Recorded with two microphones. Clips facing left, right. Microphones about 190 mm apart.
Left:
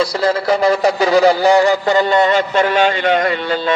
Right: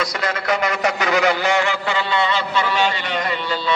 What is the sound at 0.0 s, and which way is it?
A man's voice, 30° left (ahead or behind).